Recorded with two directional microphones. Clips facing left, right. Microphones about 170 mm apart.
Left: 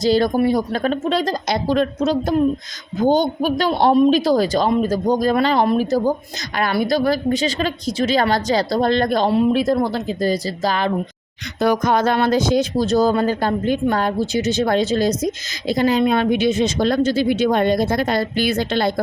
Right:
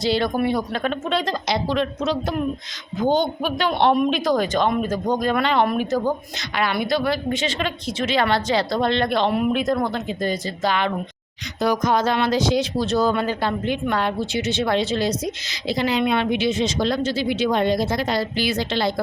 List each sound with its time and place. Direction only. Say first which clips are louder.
0.0 s speech: left 5 dB; 40° left (ahead or behind)
11.6 s a woman's voice: left 3 dB; 60° left (ahead or behind)